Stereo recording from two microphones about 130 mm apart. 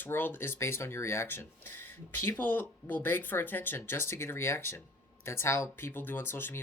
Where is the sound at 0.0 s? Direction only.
15° left (ahead or behind).